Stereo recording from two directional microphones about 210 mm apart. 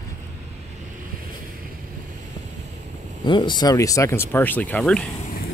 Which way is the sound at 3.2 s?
20° left (ahead or behind).